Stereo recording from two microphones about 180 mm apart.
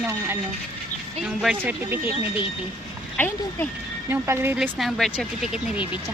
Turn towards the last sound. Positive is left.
turn(degrees=0)  # may be behind; listen again after turning